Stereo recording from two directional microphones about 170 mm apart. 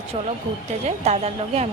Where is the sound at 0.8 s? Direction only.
40° right (ahead or behind).